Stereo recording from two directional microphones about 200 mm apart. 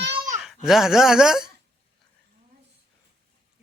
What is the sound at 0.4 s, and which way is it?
Speech, centre (ahead or behind).